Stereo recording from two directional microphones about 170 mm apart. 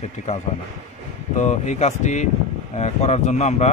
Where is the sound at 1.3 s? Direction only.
45° left (ahead or behind).